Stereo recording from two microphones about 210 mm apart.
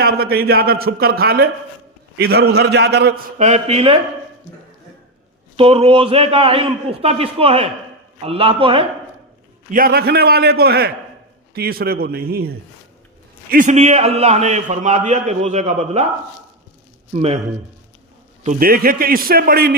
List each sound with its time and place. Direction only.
0.0 s a man's voice: 45° right (ahead or behind)
3.3 s a man's voice: 30° right (ahead or behind)
5.5 s a man's voice: 25° right (ahead or behind)
9.7 s a man's voice: 45° right (ahead or behind)
13.5 s a man's voice: 35° right (ahead or behind)
17.2 s a man's voice: 30° right (ahead or behind)
18.4 s a man's voice: 45° right (ahead or behind)